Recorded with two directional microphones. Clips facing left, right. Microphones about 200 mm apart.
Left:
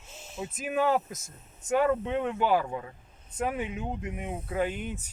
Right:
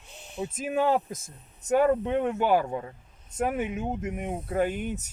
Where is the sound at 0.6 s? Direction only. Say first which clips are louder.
Right 1 dB; 30° right (ahead or behind).